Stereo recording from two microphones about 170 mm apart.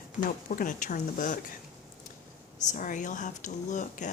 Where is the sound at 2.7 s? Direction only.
50° left (ahead or behind).